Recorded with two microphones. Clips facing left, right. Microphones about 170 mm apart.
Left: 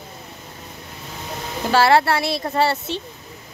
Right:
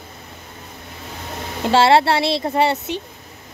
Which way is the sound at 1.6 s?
25° right (ahead or behind).